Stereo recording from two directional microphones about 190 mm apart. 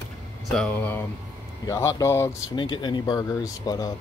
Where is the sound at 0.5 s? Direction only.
5° left (ahead or behind).